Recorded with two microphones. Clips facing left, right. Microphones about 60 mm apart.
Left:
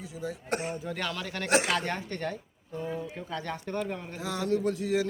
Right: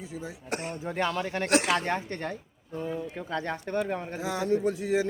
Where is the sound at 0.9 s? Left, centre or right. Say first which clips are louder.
Right 5 dB; right.